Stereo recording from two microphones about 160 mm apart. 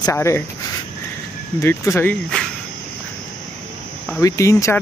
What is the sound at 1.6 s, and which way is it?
Speech, 15° left (ahead or behind).